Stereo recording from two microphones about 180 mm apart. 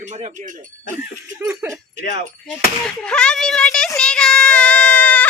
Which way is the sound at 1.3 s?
15° right (ahead or behind).